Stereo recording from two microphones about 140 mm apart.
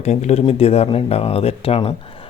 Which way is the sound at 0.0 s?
55° left (ahead or behind).